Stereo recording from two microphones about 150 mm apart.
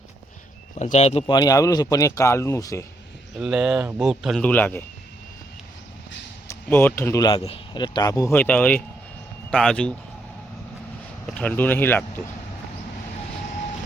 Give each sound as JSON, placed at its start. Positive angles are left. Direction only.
{"t": 0.8, "sound": "speech", "side_deg": 50}
{"t": 1.3, "sound": "speech", "side_deg": 25}
{"t": 3.3, "sound": "speech", "side_deg": -5}
{"t": 4.4, "sound": "speech", "side_deg": 10}
{"t": 6.5, "sound": "speech", "side_deg": 15}
{"t": 11.3, "sound": "speech", "side_deg": 10}